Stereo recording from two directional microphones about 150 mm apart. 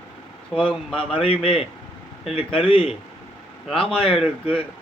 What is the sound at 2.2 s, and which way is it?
Speech, 35° left (ahead or behind).